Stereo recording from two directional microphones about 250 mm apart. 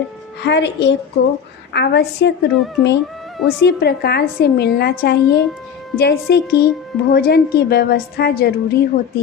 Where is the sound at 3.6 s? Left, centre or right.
Left.